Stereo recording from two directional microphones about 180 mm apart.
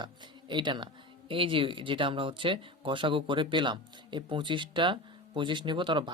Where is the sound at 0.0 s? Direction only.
25° right (ahead or behind).